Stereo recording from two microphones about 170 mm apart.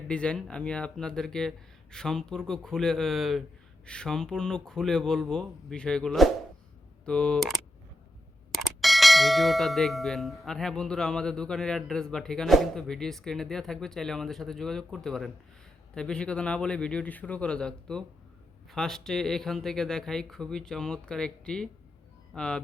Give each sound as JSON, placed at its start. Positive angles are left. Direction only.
{"t": 0.1, "sound": "clang", "side_deg": 5}